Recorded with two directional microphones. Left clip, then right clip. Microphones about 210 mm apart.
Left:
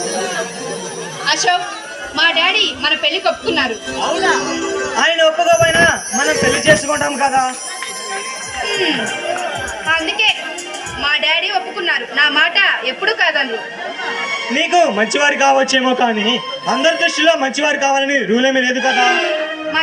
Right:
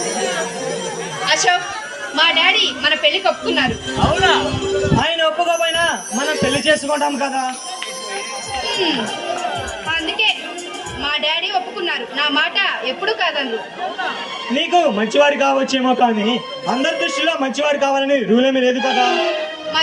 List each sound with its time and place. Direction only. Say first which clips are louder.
0.0 s chatter: left 1 dB; 10° left (ahead or behind)
1.2 s a man's voice: left 1 dB; 10° left (ahead or behind)
4.2 s speech: right 1 dB; 5° right (ahead or behind)
4.4 s a man's voice: even; 15° left (ahead or behind)
7.0 s a man's voice: left 4 dB; 15° left (ahead or behind)
8.6 s music: left 3 dB; 20° left (ahead or behind)
11.0 s a sound: left 4 dB; 20° left (ahead or behind)
11.4 s chatter: left 3 dB; 15° left (ahead or behind)
13.0 s a man's voice: left 4 dB; 20° left (ahead or behind)